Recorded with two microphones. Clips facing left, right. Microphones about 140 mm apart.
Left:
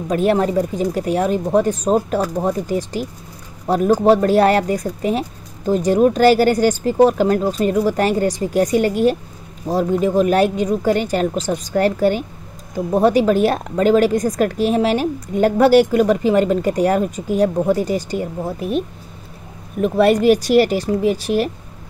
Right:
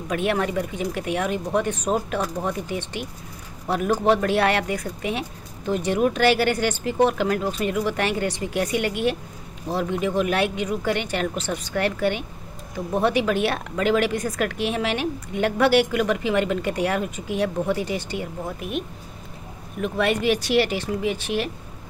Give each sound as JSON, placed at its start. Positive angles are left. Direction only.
{"t": 0.1, "sound": "a woman's voice", "side_deg": 35}